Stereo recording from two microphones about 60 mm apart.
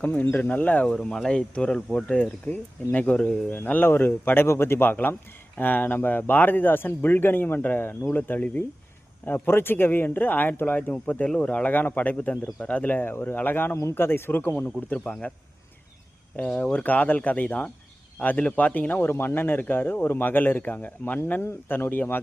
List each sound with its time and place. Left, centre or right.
0.0 s speech: left
0.9 s speech: centre
16.5 s speech: centre
21.4 s speech: left